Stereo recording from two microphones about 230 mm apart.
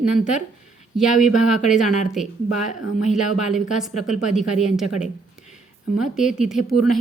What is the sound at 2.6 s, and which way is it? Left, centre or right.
Speech, left.